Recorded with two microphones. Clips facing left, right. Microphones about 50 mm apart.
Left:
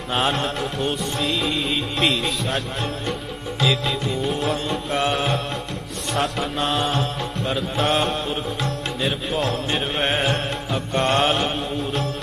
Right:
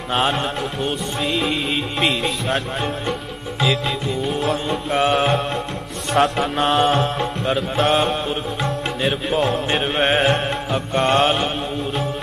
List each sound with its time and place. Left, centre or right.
0.1 s music: centre
3.6 s music: centre